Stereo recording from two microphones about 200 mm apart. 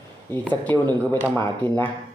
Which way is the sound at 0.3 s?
10° left (ahead or behind).